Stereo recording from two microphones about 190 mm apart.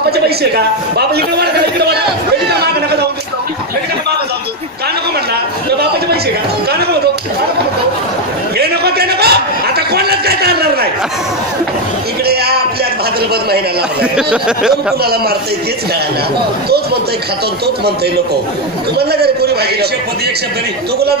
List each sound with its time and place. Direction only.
0.9 s a sound: 60° right (ahead or behind)
8.5 s chuckle: 55° right (ahead or behind)
14.1 s speech: 5° right (ahead or behind)
18.9 s a man's voice: 55° right (ahead or behind)